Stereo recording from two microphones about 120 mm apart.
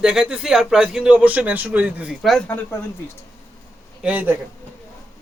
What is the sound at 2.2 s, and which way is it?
Speech, centre (ahead or behind).